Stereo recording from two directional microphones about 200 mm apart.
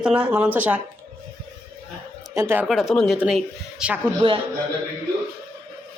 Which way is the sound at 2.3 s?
10° right (ahead or behind).